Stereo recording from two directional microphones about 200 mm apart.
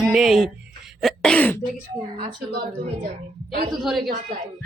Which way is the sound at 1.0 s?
Centre (ahead or behind).